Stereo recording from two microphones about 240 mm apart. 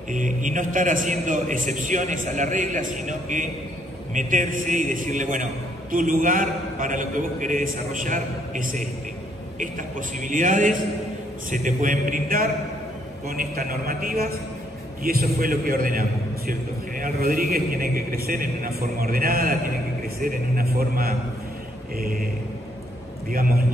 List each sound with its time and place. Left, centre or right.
0.1 s a man's voice: right